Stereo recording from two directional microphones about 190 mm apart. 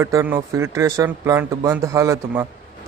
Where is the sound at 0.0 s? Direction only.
15° right (ahead or behind).